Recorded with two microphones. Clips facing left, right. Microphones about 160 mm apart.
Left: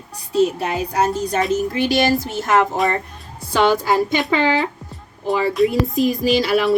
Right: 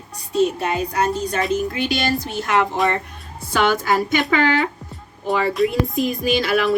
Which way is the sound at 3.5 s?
30° left (ahead or behind).